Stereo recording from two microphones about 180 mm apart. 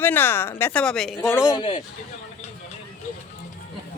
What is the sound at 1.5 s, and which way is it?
Speech, 25° left (ahead or behind).